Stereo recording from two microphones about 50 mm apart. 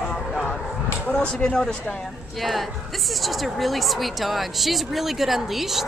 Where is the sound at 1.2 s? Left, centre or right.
Left.